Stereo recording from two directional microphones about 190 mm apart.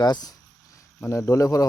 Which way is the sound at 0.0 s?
20° left (ahead or behind).